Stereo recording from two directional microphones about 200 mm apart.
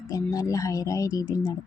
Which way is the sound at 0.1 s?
15° left (ahead or behind).